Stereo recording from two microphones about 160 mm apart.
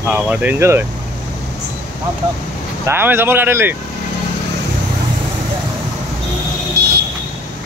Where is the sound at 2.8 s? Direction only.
15° right (ahead or behind).